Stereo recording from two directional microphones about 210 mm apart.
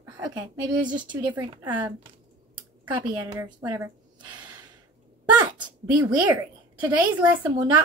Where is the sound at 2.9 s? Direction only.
20° right (ahead or behind).